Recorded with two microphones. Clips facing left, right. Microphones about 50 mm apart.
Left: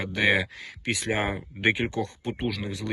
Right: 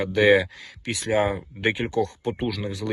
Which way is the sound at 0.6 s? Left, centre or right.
Left.